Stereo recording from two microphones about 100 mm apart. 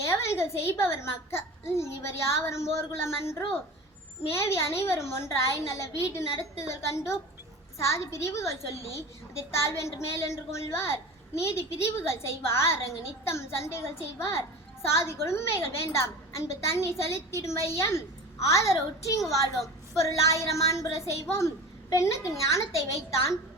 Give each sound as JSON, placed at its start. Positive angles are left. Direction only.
{"t": 0.0, "sound": "a woman's voice", "side_deg": 25}